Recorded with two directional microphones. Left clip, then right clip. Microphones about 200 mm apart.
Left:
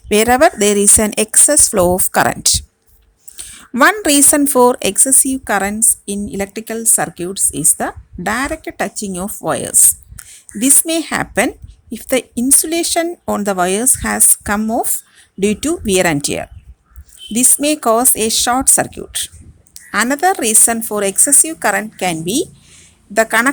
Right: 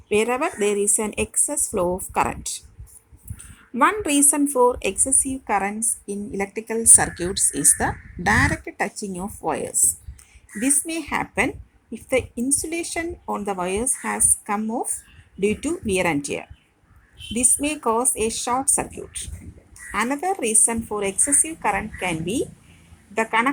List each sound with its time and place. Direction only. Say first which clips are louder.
0.1 s a woman's voice: left 11 dB; 55° left (ahead or behind); by 7.2 s 40° left (ahead or behind)
7.5 s speech: left 4 dB; 70° left (ahead or behind)
8.4 s speech: left 4 dB; 35° left (ahead or behind)
9.1 s speech: left 7 dB; 70° left (ahead or behind)
11.2 s a woman's voice: left 7 dB; 55° left (ahead or behind)